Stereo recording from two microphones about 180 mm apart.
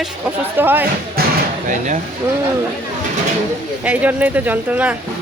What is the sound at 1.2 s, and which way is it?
Music, 60° right (ahead or behind).